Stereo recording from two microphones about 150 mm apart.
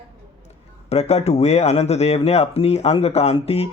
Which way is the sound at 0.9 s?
45° left (ahead or behind).